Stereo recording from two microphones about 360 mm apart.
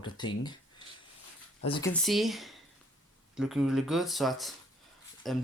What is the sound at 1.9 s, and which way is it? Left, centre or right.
Speech, centre.